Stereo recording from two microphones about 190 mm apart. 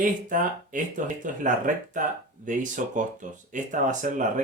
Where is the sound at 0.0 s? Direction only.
45° right (ahead or behind).